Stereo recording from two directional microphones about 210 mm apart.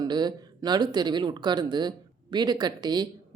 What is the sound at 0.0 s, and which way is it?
Speech, 20° right (ahead or behind).